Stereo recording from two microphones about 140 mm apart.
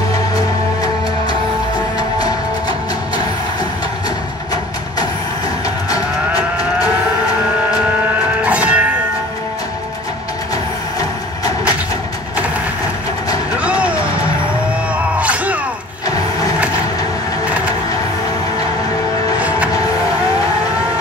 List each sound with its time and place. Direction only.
5.9 s moo: 25° left (ahead or behind)
8.5 s music: 10° right (ahead or behind)
10.5 s music: 25° left (ahead or behind)
13.6 s music: 10° right (ahead or behind)
15.1 s music: 10° right (ahead or behind)